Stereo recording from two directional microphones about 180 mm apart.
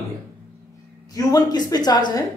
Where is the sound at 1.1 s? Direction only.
20° left (ahead or behind).